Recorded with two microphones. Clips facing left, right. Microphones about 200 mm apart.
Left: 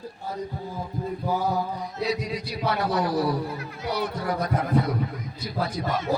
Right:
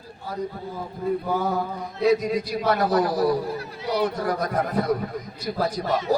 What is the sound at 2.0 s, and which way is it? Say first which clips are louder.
A man's voice: right 11 dB; 45° right (ahead or behind).